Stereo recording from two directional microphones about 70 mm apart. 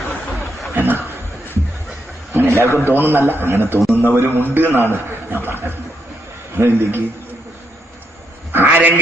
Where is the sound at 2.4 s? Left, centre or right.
Right.